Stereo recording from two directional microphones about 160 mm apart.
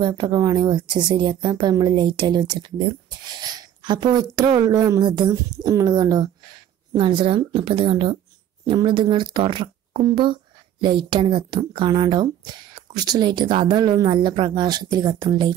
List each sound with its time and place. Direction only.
0.0 s speech: 25° right (ahead or behind)